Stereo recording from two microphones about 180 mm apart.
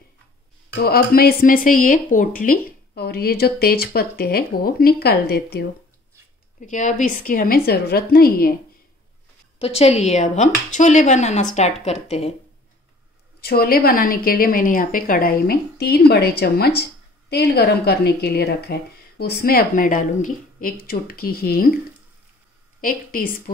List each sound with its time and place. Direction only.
0.8 s speech: 55° left (ahead or behind)
6.6 s speech: 45° left (ahead or behind)
9.6 s speech: 35° left (ahead or behind)
13.4 s speech: 55° left (ahead or behind)
22.8 s a woman's voice: 50° left (ahead or behind)